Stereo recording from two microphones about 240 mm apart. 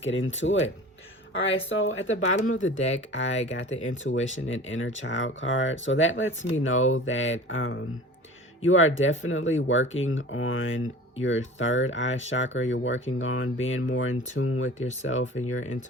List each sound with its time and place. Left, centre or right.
0.0 s speech: left